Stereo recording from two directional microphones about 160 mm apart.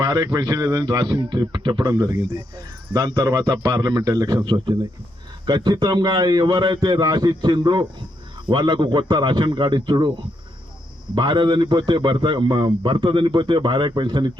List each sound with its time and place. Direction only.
0.0 s a man's voice: 25° right (ahead or behind)
11.1 s a man's voice: 30° right (ahead or behind)